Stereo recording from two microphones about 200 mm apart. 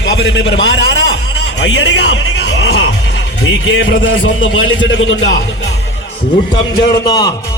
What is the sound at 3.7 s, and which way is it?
A man's voice, 70° left (ahead or behind).